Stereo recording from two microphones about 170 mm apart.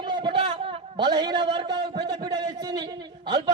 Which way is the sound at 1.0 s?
25° right (ahead or behind).